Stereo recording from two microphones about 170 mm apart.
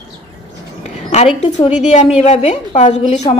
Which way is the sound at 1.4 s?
40° left (ahead or behind).